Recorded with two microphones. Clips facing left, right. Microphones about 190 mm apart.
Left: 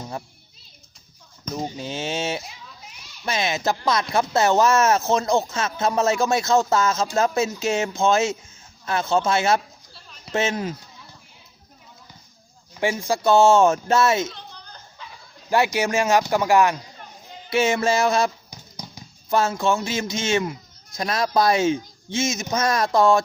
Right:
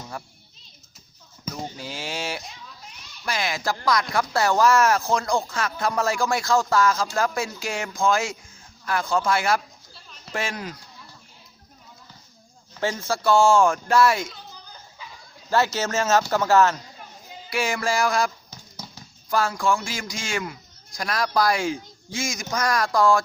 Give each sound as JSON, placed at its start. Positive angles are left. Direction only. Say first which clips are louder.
{"t": 1.6, "sound": "speech", "louder": "left 7 dB", "side_deg": 20}
{"t": 9.9, "sound": "a sound", "louder": "even", "side_deg": 0}
{"t": 10.3, "sound": "speech", "louder": "left 6 dB", "side_deg": 25}
{"t": 12.7, "sound": "speech", "louder": "left 3 dB", "side_deg": 15}
{"t": 14.5, "sound": "a sound", "louder": "left 1 dB", "side_deg": -5}
{"t": 15.4, "sound": "speech", "louder": "left 2 dB", "side_deg": 15}